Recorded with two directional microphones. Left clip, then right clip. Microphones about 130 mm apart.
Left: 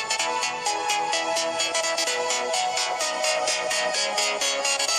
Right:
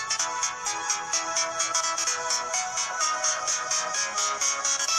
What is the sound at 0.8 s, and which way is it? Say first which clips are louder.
Music: left 5 dB; 40° left (ahead or behind).